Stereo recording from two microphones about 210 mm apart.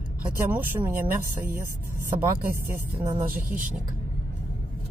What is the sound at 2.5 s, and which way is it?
Speech, 10° right (ahead or behind).